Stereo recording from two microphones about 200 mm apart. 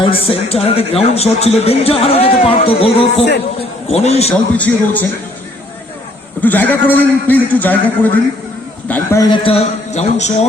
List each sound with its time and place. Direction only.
0.0 s a man's voice: 30° left (ahead or behind)
4.5 s a man's voice: 10° left (ahead or behind)
6.4 s a man's voice: 10° left (ahead or behind)
8.9 s a man's voice: 10° left (ahead or behind); by 10.4 s 35° left (ahead or behind)